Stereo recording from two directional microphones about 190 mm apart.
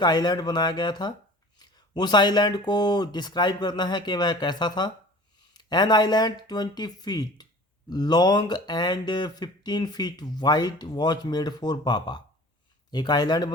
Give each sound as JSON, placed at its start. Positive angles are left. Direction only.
{"t": 0.0, "sound": "speech", "side_deg": 20}